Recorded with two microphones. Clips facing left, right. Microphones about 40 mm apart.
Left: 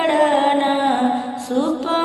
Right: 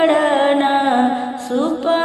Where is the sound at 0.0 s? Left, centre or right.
Centre.